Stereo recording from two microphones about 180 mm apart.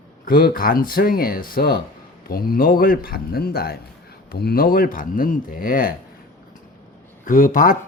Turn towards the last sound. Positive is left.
turn(degrees=50)  # may be behind; listen again after turning